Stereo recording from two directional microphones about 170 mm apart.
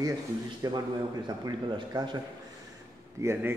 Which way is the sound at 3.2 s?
15° right (ahead or behind).